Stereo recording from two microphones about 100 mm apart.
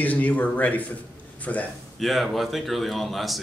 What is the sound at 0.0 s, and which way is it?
A man's voice, 15° left (ahead or behind).